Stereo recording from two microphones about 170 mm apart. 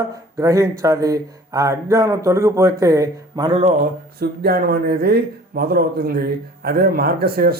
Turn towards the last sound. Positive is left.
turn(degrees=-65)  # may be behind; listen again after turning